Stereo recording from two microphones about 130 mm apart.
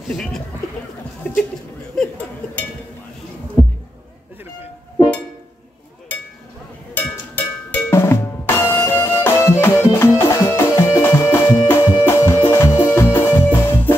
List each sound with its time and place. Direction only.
0.1 s speech: 5° left (ahead or behind)
1.2 s a sound: 15° left (ahead or behind)
6.9 s drum: 15° left (ahead or behind)
12.0 s music: 20° left (ahead or behind)